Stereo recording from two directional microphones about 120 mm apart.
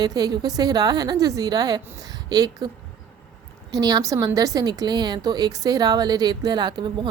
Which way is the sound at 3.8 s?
30° right (ahead or behind).